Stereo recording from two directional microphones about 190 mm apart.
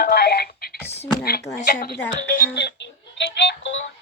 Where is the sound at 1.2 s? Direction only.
55° left (ahead or behind).